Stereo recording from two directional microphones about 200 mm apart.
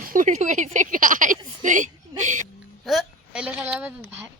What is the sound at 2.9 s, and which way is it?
Speech, 5° right (ahead or behind).